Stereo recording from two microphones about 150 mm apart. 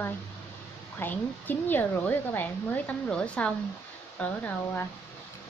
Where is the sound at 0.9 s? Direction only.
15° left (ahead or behind).